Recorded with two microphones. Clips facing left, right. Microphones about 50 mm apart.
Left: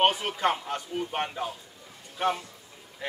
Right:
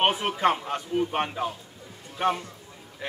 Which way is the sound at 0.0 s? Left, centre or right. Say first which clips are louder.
Right 1 dB; centre.